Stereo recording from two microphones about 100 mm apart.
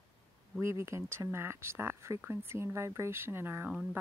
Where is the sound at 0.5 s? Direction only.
30° right (ahead or behind).